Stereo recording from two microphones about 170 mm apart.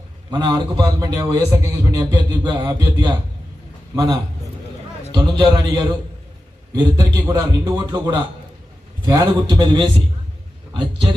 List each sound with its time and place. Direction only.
0.3 s a man's voice: 25° right (ahead or behind)
3.9 s a man's voice: 20° right (ahead or behind)